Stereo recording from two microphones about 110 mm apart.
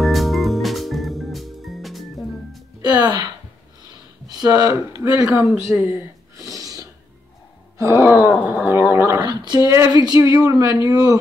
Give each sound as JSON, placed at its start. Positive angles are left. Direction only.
{"t": 0.0, "sound": "music", "side_deg": 0}
{"t": 2.8, "sound": "music", "side_deg": -40}
{"t": 4.3, "sound": "speech", "side_deg": -35}
{"t": 6.3, "sound": "a sound", "side_deg": -30}
{"t": 7.8, "sound": "speech", "side_deg": -20}
{"t": 9.2, "sound": "a sound", "side_deg": -45}
{"t": 10.0, "sound": "speech", "side_deg": -35}